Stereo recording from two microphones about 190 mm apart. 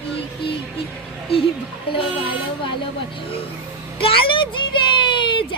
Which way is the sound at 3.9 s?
30° left (ahead or behind).